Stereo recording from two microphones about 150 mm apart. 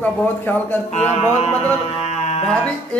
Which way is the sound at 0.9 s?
45° left (ahead or behind).